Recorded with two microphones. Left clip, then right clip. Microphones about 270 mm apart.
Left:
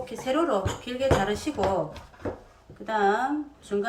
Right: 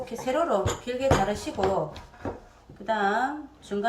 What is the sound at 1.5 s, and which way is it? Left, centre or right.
Speech, centre.